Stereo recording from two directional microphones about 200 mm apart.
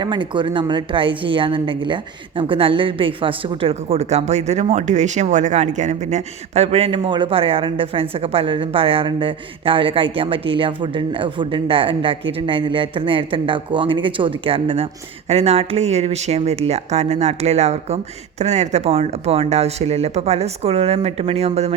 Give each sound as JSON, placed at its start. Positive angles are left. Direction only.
{"t": 0.0, "sound": "a woman's voice", "side_deg": -25}